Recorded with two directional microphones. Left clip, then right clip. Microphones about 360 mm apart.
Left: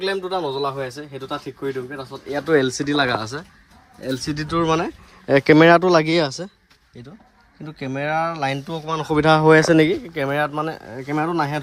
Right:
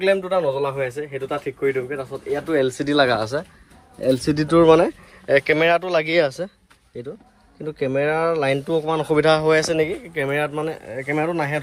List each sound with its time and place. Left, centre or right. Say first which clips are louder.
0.3 s speech: right 3 dB; centre
5.3 s speech: left 4 dB; centre
7.8 s speech: right 2 dB; centre